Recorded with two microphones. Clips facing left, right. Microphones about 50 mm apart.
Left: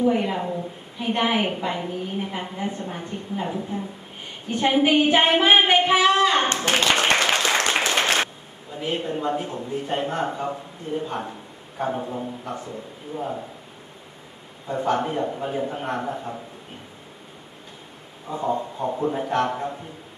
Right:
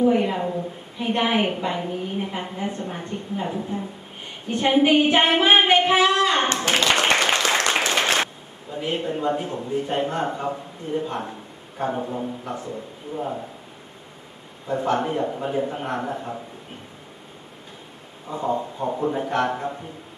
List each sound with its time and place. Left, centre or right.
0.0 s a woman's voice: centre
6.6 s speech: left
6.9 s speech: right
7.7 s applause: right
8.7 s a woman's voice: centre
14.7 s a woman's voice: centre
18.3 s a woman's voice: centre